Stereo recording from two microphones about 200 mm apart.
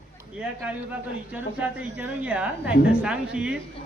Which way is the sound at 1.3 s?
5° right (ahead or behind).